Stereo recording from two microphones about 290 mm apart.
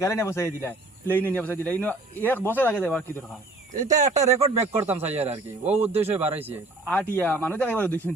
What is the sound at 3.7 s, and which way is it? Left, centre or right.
Speech, right.